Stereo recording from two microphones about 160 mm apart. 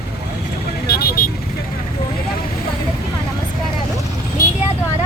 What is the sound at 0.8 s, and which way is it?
Vehicle, 75° left (ahead or behind).